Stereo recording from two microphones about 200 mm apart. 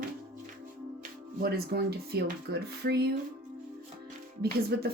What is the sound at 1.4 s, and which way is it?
A woman's voice, 50° right (ahead or behind).